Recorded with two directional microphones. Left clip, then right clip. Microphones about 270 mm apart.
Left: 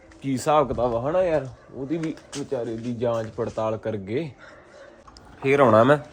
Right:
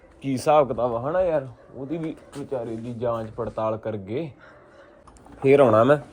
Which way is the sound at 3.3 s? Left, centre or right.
Centre.